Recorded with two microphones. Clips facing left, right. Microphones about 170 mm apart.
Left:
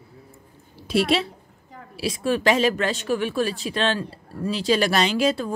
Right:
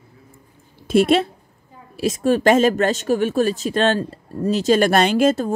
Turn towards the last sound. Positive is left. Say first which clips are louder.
# right 5 dB
turn(degrees=-45)  # may be behind; listen again after turning